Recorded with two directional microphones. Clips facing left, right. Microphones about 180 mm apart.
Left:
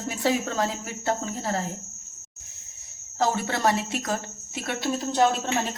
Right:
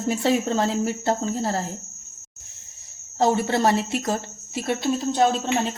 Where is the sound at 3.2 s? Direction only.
25° right (ahead or behind).